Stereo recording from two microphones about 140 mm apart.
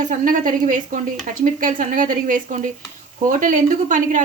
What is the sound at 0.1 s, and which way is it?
A woman's voice, 70° right (ahead or behind).